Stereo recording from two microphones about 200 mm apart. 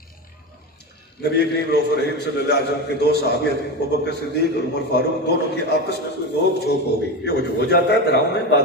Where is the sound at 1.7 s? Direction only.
55° left (ahead or behind).